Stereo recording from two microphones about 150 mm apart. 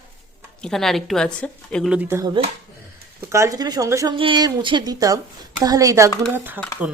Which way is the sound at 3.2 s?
20° right (ahead or behind).